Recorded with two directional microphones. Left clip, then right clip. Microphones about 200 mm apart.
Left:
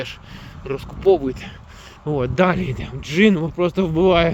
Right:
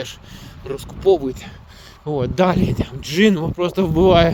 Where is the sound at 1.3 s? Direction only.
10° right (ahead or behind).